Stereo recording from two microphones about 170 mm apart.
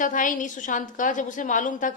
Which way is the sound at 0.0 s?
50° left (ahead or behind).